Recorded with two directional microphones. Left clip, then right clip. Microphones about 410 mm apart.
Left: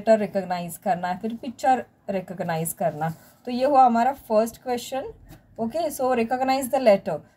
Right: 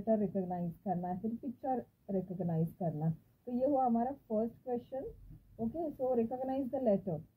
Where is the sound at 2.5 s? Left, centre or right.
Centre.